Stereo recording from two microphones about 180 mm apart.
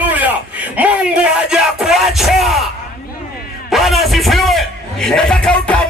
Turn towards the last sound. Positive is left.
turn(degrees=5)  # may be behind; listen again after turning